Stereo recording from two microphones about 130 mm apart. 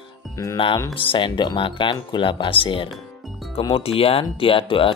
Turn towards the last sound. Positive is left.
turn(degrees=40)  # may be behind; listen again after turning